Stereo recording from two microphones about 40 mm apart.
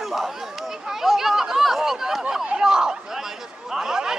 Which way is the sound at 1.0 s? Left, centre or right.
Centre.